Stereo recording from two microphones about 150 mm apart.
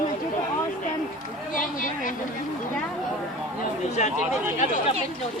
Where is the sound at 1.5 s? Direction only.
65° left (ahead or behind).